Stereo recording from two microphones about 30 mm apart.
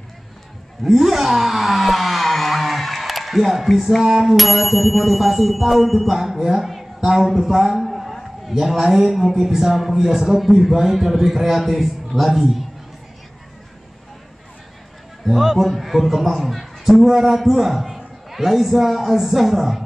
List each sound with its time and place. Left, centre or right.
0.8 s a sound: centre
4.0 s a man's voice: centre
4.3 s speech: centre
6.1 s a man's voice: centre
6.6 s a sound: centre
7.2 s speech: centre
7.8 s a sound: centre
8.5 s a man's voice: centre
15.5 s speech: centre
16.9 s a man's voice: centre